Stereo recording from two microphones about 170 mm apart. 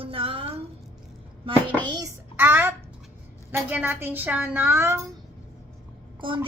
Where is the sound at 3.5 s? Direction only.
10° right (ahead or behind).